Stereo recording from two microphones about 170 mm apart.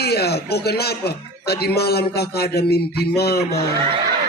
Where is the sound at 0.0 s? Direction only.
70° left (ahead or behind).